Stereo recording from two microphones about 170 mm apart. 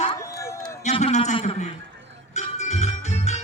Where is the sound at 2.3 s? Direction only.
40° left (ahead or behind).